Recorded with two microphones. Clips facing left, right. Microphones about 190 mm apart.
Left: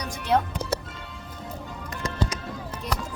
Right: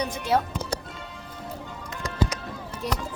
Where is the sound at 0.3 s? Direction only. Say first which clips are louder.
Left 1 dB; 5° right (ahead or behind).